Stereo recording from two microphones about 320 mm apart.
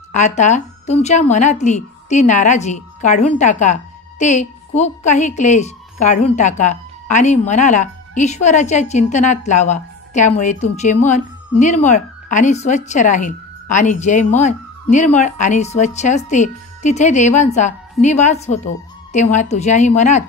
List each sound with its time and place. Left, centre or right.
0.1 s a woman's voice: left